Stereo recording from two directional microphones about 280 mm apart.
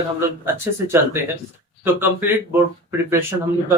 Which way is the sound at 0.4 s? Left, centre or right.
Centre.